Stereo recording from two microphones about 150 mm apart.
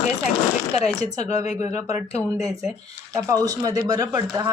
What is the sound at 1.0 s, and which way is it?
Speech, 50° left (ahead or behind).